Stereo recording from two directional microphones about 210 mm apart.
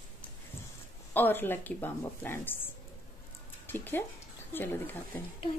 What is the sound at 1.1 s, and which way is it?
A woman's voice, 10° left (ahead or behind).